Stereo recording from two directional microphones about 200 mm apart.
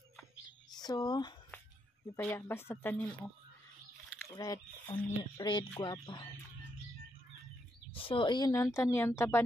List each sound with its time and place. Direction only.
0.7 s speech: 20° left (ahead or behind)
2.1 s speech: 10° left (ahead or behind)
4.4 s speech: 15° left (ahead or behind)
7.9 s speech: 25° left (ahead or behind)